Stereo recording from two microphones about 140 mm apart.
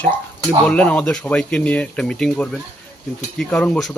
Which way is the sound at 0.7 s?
10° left (ahead or behind).